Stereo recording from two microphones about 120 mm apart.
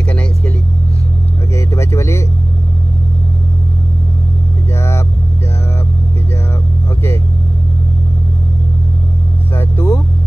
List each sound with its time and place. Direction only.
1.5 s vehicle: 25° left (ahead or behind)
4.7 s vehicle: 20° left (ahead or behind)
9.6 s vehicle: 20° left (ahead or behind)